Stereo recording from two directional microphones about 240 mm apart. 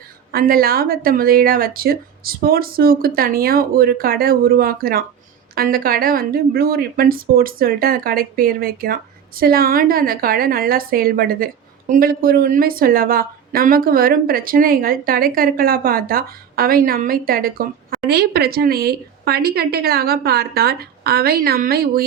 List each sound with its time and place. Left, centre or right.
0.3 s a woman's voice: right